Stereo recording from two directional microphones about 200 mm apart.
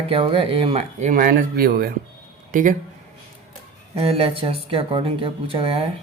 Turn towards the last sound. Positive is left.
turn(degrees=-30)  # may be behind; listen again after turning